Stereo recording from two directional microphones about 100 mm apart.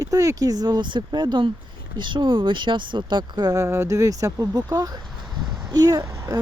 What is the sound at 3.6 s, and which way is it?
Speech, 30° right (ahead or behind).